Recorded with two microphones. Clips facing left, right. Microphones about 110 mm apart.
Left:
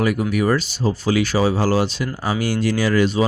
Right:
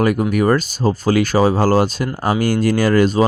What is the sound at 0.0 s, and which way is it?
Speech, 45° right (ahead or behind).